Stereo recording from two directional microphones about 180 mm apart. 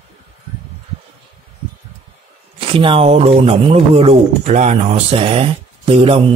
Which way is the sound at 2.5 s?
30° right (ahead or behind).